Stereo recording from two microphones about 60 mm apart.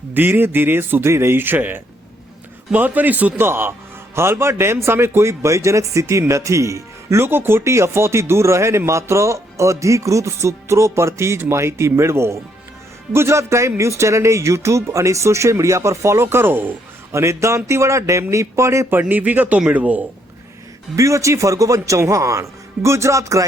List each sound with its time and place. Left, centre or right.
0.1 s speech: right
3.3 s a man's voice: right
7.3 s a man's voice: right
17.1 s a man's voice: right
18.9 s speech: right
20.9 s a man's voice: right